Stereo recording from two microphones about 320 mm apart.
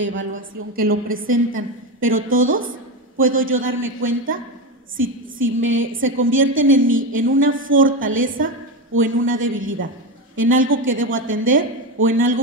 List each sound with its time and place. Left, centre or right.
0.0 s a woman's voice: right